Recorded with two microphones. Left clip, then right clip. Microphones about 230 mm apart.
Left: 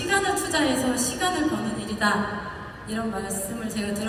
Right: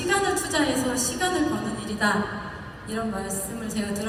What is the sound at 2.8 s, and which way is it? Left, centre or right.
A woman's voice, right.